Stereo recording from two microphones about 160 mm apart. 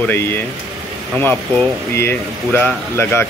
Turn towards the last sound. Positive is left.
turn(degrees=15)  # may be behind; listen again after turning